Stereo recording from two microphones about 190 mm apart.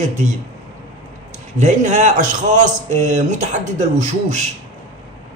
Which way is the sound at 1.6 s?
40° right (ahead or behind).